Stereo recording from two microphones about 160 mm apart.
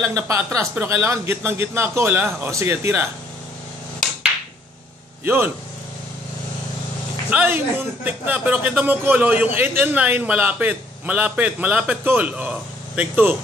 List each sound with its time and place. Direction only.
0.0 s speech: 20° right (ahead or behind)
5.2 s a man's voice: 15° right (ahead or behind)
7.2 s speech: 10° right (ahead or behind)